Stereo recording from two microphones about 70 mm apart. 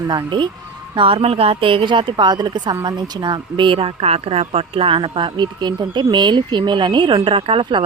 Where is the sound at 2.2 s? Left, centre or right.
Right.